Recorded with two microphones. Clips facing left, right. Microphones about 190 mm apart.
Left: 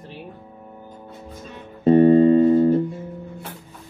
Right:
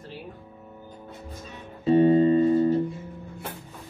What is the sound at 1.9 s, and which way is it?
Music, 55° left (ahead or behind).